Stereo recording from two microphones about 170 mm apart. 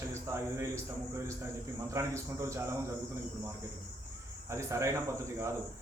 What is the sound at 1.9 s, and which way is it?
Speech, 15° right (ahead or behind).